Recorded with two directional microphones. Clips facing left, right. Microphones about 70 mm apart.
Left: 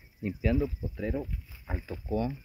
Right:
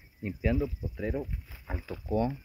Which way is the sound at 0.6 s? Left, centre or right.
Centre.